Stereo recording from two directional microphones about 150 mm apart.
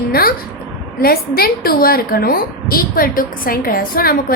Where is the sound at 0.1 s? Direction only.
80° left.